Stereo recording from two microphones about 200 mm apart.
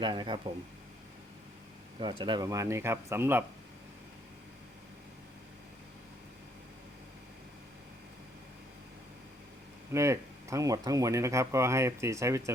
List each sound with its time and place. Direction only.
0.0 s speech: 20° right (ahead or behind)
2.0 s speech: 25° right (ahead or behind)
9.9 s speech: 15° right (ahead or behind)